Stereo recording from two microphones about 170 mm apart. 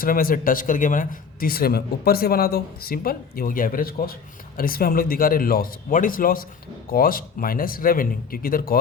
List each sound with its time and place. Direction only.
0.0 s speech: 55° left (ahead or behind)